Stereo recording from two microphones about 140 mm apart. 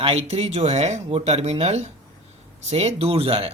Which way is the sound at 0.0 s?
45° right (ahead or behind).